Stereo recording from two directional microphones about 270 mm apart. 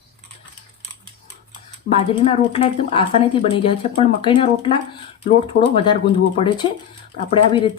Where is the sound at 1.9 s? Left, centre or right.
Left.